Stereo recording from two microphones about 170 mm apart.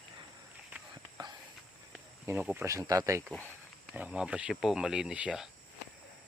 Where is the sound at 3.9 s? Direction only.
5° right (ahead or behind).